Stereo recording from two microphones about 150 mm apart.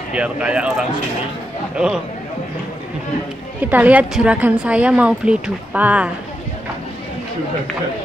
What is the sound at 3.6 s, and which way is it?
A woman's voice, 10° right (ahead or behind).